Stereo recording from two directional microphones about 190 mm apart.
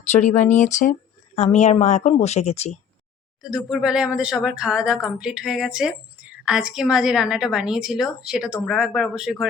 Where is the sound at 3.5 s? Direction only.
5° right (ahead or behind).